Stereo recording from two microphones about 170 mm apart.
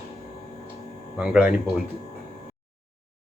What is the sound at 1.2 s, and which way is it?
Speech, 5° right (ahead or behind).